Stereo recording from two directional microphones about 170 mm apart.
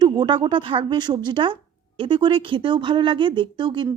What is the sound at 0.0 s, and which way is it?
A woman's voice, 25° right (ahead or behind).